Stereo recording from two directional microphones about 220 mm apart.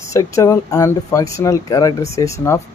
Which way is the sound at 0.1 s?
15° left (ahead or behind).